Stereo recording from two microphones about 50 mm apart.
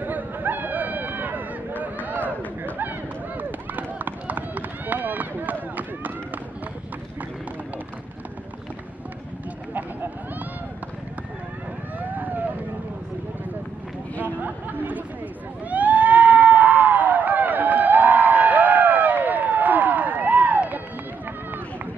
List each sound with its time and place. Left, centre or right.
0.0 s run: right
12.0 s vehicle: right
14.2 s chatter: right
15.7 s a sound: right